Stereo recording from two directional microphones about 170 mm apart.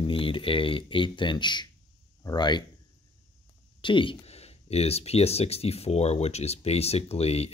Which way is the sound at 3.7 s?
30° left (ahead or behind).